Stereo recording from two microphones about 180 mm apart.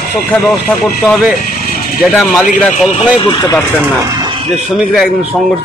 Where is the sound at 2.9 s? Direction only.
25° left (ahead or behind).